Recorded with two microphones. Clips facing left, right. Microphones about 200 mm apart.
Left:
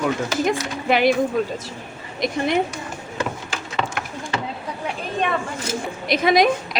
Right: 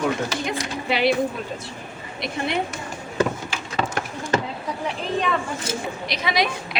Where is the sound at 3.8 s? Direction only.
40° right (ahead or behind).